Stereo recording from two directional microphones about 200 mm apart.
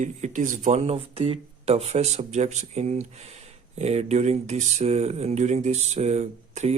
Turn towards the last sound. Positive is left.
turn(degrees=-35)  # may be behind; listen again after turning